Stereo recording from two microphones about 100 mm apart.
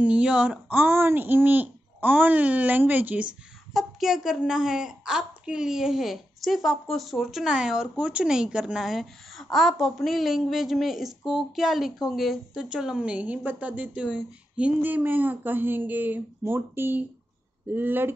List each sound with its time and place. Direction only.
0.0 s speech: 10° right (ahead or behind)
3.7 s a woman's voice: 5° right (ahead or behind); by 18.1 s 20° right (ahead or behind)